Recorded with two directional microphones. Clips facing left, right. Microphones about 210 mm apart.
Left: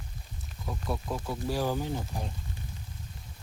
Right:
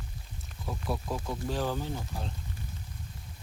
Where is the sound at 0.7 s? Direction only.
Centre (ahead or behind).